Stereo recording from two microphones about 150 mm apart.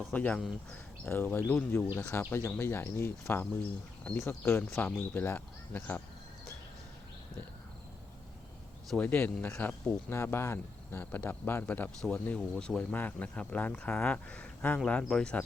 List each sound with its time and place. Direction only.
0.0 s speech: 10° left (ahead or behind)
8.9 s speech: 10° left (ahead or behind)